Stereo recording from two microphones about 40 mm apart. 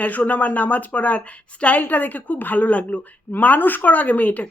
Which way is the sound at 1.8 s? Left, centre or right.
Left.